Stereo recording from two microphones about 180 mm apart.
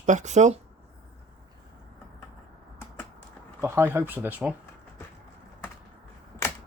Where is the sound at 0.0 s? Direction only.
40° right (ahead or behind).